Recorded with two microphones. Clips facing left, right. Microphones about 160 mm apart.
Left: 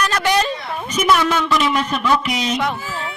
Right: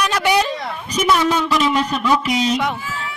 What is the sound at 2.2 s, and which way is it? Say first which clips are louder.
Speech: right 3 dB; 35° right (ahead or behind).